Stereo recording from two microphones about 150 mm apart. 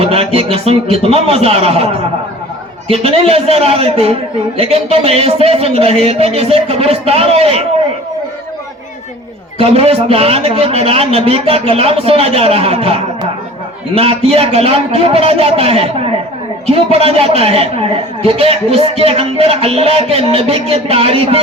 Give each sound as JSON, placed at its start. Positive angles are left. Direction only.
{"t": 0.0, "sound": "a man's voice", "side_deg": -40}
{"t": 9.6, "sound": "a man's voice", "side_deg": -40}